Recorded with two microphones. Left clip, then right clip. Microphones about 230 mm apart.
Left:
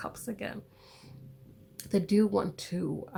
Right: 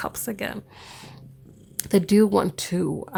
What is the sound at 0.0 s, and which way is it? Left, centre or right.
Speech, right.